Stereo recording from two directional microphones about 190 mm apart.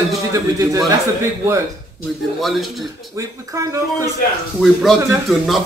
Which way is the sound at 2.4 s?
Centre (ahead or behind).